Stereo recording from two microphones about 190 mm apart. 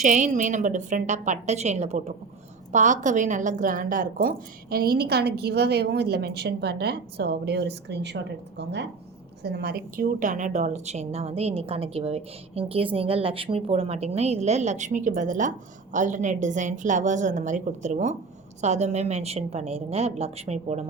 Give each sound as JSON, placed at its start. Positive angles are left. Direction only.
{"t": 0.0, "sound": "a woman's voice", "side_deg": -40}